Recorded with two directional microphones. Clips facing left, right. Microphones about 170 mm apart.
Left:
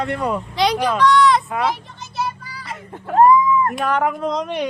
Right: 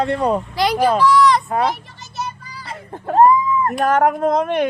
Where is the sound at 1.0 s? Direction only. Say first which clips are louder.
Left 3 dB; centre (ahead or behind).